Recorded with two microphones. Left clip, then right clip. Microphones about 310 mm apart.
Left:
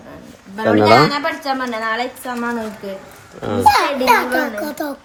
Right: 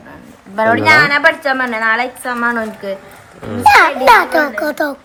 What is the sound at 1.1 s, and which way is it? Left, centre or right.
A woman's voice, right.